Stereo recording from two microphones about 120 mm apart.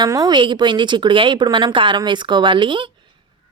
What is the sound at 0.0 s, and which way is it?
Speech, 35° right (ahead or behind).